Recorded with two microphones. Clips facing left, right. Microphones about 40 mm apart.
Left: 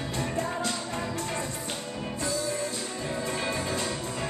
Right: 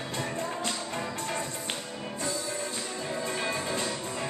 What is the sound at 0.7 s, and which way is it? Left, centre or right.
Music, centre.